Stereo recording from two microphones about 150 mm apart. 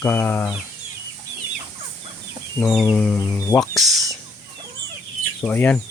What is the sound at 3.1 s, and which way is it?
Speech, 20° left (ahead or behind).